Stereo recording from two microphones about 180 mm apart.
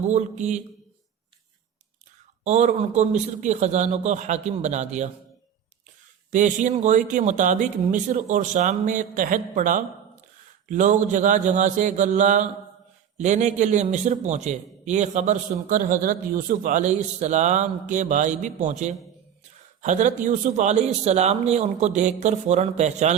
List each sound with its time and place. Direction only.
0.1 s a man's voice: 40° right (ahead or behind)
2.4 s a man's voice: 40° right (ahead or behind)
6.3 s a man's voice: 45° right (ahead or behind)